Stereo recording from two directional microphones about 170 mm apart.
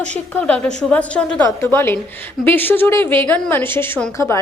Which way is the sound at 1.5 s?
20° left (ahead or behind).